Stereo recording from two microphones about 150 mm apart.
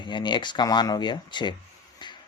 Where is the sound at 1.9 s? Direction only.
30° left (ahead or behind).